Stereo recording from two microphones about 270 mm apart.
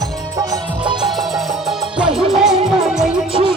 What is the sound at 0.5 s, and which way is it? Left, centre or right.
Music, centre.